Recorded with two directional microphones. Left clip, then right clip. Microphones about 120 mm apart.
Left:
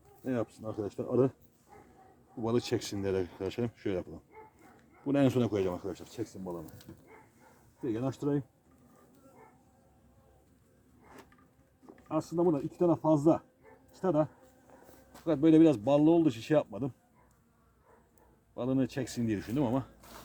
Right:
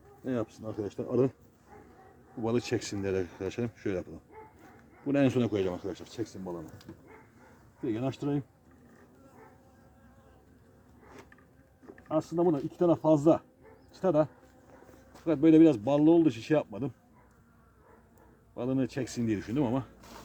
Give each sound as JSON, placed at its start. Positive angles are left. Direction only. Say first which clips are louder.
{"t": 0.6, "sound": "speech", "louder": "right 1 dB", "side_deg": 30}
{"t": 2.3, "sound": "speech", "louder": "right 1 dB", "side_deg": 25}
{"t": 7.8, "sound": "speech", "louder": "right 1 dB", "side_deg": 5}
{"t": 12.1, "sound": "speech", "louder": "right 2 dB", "side_deg": 10}
{"t": 12.7, "sound": "speech", "louder": "right 4 dB", "side_deg": -5}
{"t": 15.2, "sound": "speech", "louder": "right 2 dB", "side_deg": 25}
{"t": 18.5, "sound": "speech", "louder": "even", "side_deg": 25}
{"t": 20.0, "sound": "a sound", "louder": "right 2 dB", "side_deg": 0}